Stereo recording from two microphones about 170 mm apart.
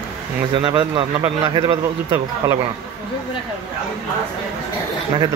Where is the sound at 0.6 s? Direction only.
30° right (ahead or behind).